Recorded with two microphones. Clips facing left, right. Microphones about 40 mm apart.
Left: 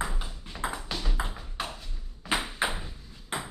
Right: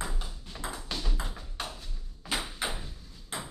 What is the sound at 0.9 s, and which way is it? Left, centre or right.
Tap, centre.